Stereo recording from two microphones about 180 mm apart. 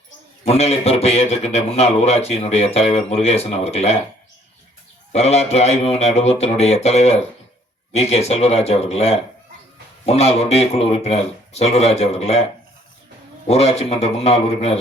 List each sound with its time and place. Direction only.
0.4 s a man's voice: 35° left (ahead or behind)
5.1 s a man's voice: 35° left (ahead or behind)
13.5 s a man's voice: 35° left (ahead or behind)